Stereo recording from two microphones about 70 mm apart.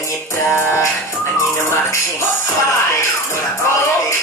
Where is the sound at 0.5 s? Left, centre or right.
Left.